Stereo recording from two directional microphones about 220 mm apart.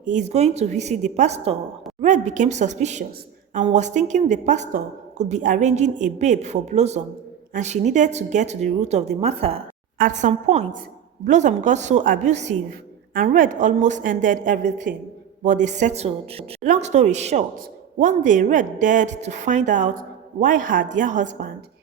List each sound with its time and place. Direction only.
0.0 s a woman's voice: 35° right (ahead or behind)